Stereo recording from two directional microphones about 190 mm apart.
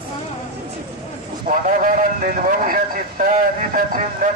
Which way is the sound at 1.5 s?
45° right (ahead or behind).